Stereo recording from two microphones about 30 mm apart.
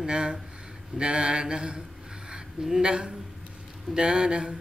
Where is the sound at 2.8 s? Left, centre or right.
Right.